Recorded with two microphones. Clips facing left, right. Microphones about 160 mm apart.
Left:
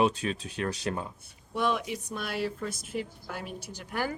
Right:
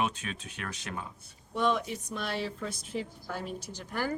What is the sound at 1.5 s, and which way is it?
A woman's voice, 10° left (ahead or behind).